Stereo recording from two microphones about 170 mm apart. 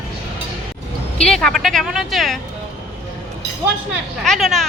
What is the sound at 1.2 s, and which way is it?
Speech, 5° left (ahead or behind).